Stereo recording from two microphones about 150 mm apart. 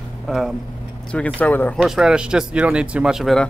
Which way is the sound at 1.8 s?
5° right (ahead or behind).